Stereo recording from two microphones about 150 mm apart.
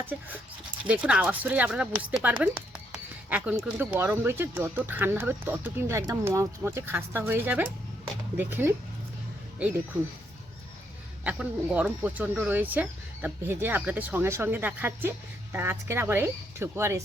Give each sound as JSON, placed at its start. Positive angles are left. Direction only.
{"t": 0.0, "sound": "speech", "side_deg": -10}
{"t": 11.2, "sound": "speech", "side_deg": -10}